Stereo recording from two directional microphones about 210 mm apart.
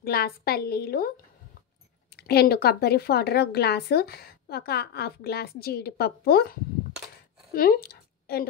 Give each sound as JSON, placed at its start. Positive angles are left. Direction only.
{"t": 0.0, "sound": "a woman's voice", "side_deg": 45}
{"t": 2.1, "sound": "a woman's voice", "side_deg": 50}
{"t": 7.5, "sound": "a sound", "side_deg": 45}